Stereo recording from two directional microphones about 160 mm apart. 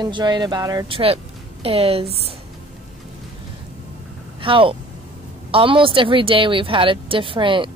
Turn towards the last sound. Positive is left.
turn(degrees=-30)  # may be behind; listen again after turning